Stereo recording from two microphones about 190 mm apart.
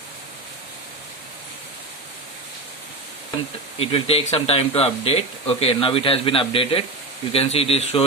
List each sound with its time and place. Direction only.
3.8 s speech: 30° left (ahead or behind)